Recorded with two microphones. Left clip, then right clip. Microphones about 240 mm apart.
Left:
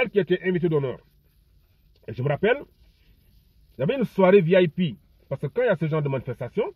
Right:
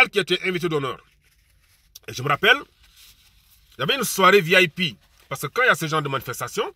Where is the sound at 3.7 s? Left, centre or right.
Right.